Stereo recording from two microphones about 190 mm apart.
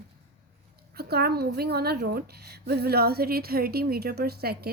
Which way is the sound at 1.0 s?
55° right (ahead or behind).